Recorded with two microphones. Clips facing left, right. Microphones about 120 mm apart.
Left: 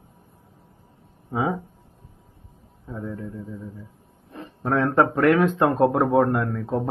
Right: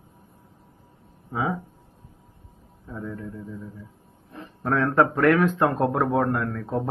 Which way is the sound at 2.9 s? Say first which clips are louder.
Left 2 dB; 30° left (ahead or behind).